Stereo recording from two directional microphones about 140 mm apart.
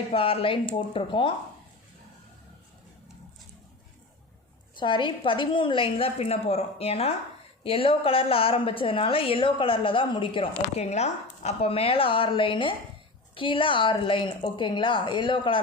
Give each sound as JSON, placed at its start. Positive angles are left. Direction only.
{"t": 0.1, "sound": "a woman's voice", "side_deg": 40}
{"t": 4.8, "sound": "a woman's voice", "side_deg": 35}
{"t": 10.8, "sound": "a woman's voice", "side_deg": 50}